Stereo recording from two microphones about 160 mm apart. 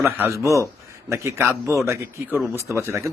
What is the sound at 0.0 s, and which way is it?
A man's voice, 15° right (ahead or behind).